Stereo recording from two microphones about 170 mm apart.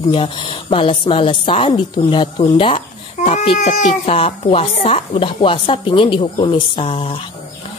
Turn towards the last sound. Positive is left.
turn(degrees=35)  # may be behind; listen again after turning